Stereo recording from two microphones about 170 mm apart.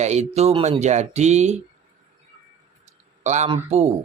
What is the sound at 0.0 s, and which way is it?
Speech, 40° right (ahead or behind).